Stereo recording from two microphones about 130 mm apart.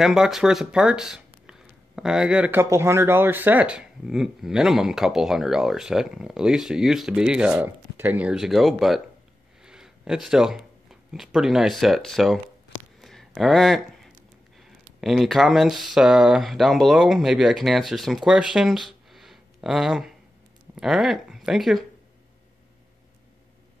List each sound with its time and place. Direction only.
0.0 s speech: 5° right (ahead or behind)
2.6 s speech: 20° right (ahead or behind); by 12.4 s centre (ahead or behind)
13.0 s a sound: centre (ahead or behind)
14.6 s speech: centre (ahead or behind)